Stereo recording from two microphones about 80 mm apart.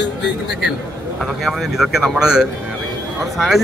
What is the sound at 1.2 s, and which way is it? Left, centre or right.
Speech, centre.